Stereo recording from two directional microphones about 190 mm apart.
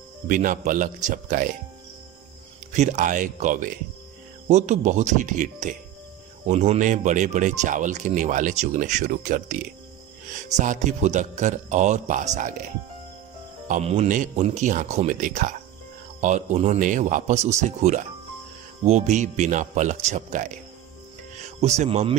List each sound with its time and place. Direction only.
0.3 s speech: 45° right (ahead or behind)
2.7 s speech: 40° right (ahead or behind)
10.6 s speech: 40° right (ahead or behind)
13.7 s speech: 35° right (ahead or behind)
21.5 s speech: 35° right (ahead or behind)